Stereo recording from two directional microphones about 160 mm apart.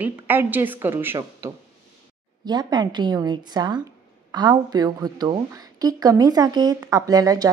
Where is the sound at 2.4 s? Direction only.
25° right (ahead or behind).